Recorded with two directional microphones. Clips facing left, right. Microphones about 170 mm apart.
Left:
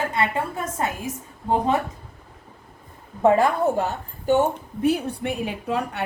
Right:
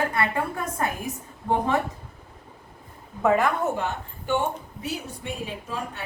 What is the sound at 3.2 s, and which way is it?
A woman's voice, 30° left (ahead or behind).